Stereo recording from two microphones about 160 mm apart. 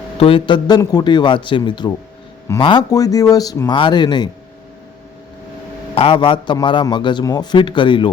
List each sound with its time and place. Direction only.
0.2 s a man's voice: 35° left (ahead or behind)
5.9 s a man's voice: 35° left (ahead or behind)